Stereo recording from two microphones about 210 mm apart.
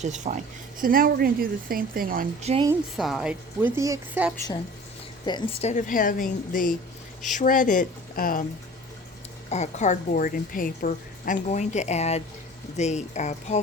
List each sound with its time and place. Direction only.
0.0 s speech: 35° right (ahead or behind)
2.9 s speech: centre (ahead or behind)
3.8 s speech: 15° right (ahead or behind)
5.2 s speech: 20° left (ahead or behind)
5.6 s a woman's voice: 40° left (ahead or behind)
9.5 s a woman's voice: 35° left (ahead or behind)